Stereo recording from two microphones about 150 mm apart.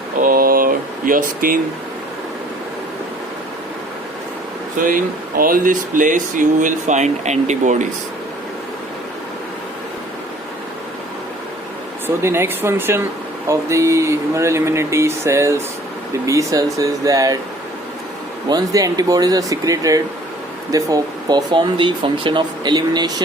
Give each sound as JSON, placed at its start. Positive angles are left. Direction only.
{"t": 0.2, "sound": "a sound", "side_deg": -70}
{"t": 4.8, "sound": "speech", "side_deg": -65}
{"t": 12.0, "sound": "speech", "side_deg": -15}
{"t": 18.4, "sound": "speech", "side_deg": -25}